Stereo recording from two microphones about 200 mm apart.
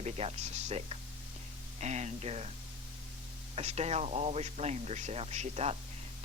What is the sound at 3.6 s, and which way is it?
Speech, 30° right (ahead or behind).